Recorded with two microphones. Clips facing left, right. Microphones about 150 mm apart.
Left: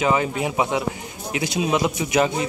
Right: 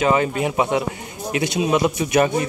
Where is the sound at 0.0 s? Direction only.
10° left (ahead or behind).